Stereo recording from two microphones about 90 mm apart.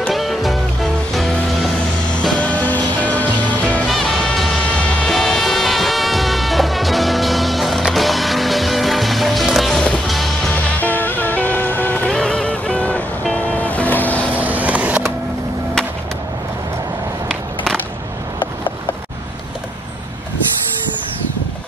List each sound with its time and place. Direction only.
0.1 s music: centre (ahead or behind)
2.1 s music: 15° left (ahead or behind)
3.8 s music: centre (ahead or behind)
10.5 s music: 20° left (ahead or behind)
14.3 s vehicle: 20° right (ahead or behind)